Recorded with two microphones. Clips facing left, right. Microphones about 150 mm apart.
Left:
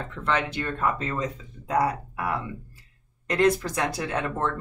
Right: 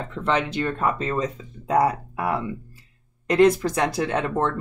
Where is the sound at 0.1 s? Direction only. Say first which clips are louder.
Right 4 dB; 20° right (ahead or behind).